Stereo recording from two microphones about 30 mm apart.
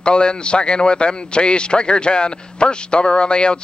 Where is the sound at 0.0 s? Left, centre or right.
Left.